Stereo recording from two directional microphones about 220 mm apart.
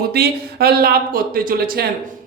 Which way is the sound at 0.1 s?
45° right (ahead or behind).